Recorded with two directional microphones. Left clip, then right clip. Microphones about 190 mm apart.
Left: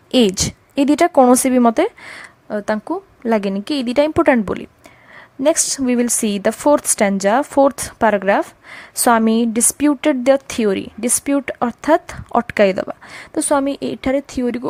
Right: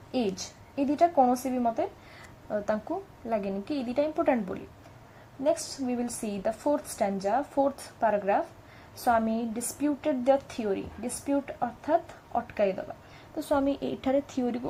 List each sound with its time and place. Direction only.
0.8 s a woman's voice: 45° left (ahead or behind)
2.1 s a woman's voice: 35° left (ahead or behind)